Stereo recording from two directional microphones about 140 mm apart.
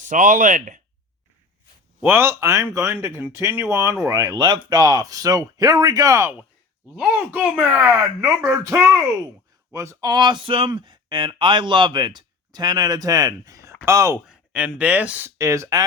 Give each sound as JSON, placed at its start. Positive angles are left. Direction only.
{"t": 0.0, "sound": "speech", "side_deg": -65}
{"t": 2.0, "sound": "speech", "side_deg": -20}
{"t": 8.2, "sound": "speech", "side_deg": -20}
{"t": 14.3, "sound": "a sound", "side_deg": -5}
{"t": 14.8, "sound": "speech", "side_deg": -10}